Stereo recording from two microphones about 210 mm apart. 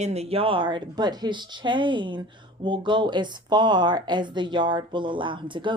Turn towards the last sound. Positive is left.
turn(degrees=-25)  # may be behind; listen again after turning